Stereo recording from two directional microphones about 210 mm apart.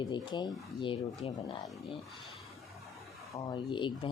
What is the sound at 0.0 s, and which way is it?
Speech, 20° left (ahead or behind).